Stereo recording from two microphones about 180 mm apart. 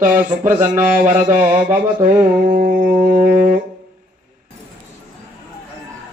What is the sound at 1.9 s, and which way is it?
Mantra, 50° right (ahead or behind).